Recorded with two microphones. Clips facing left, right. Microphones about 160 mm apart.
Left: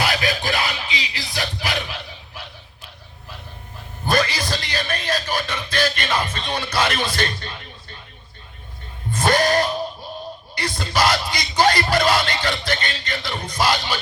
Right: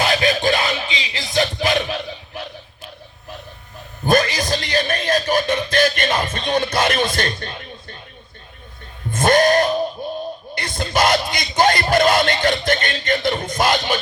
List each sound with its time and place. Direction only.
0.0 s music: 25° right (ahead or behind)
4.0 s a sound: 45° right (ahead or behind)
9.1 s music: 50° right (ahead or behind)
10.8 s music: 50° right (ahead or behind)